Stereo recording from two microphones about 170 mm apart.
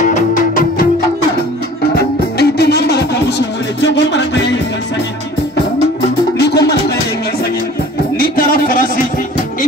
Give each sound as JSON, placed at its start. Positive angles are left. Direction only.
{"t": 0.0, "sound": "music", "side_deg": 50}
{"t": 2.0, "sound": "music", "side_deg": 70}
{"t": 6.3, "sound": "music", "side_deg": 75}
{"t": 8.2, "sound": "a sound", "side_deg": 55}